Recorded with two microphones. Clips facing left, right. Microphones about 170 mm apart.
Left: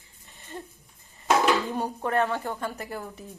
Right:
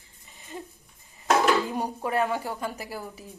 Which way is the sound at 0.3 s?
Centre (ahead or behind).